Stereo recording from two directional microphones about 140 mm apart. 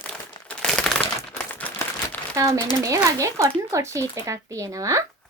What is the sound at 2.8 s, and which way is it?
Speech, 20° right (ahead or behind).